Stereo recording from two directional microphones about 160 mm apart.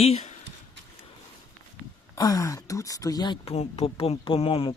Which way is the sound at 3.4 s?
40° left (ahead or behind).